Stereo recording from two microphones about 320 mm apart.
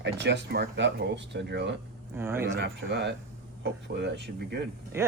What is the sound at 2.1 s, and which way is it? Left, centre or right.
Speech, centre.